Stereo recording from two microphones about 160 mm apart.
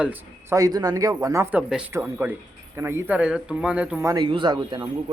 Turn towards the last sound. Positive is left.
turn(degrees=-25)  # may be behind; listen again after turning